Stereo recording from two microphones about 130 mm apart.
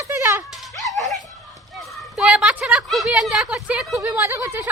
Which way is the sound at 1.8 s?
Centre (ahead or behind).